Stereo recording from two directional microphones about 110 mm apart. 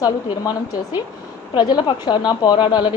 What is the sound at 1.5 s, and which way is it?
A woman's voice, 45° left (ahead or behind).